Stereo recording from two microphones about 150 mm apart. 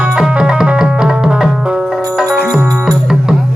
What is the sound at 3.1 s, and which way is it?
Music, 5° right (ahead or behind).